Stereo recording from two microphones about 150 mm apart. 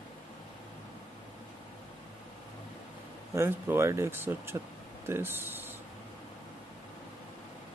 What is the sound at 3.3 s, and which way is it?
Speech, 15° right (ahead or behind).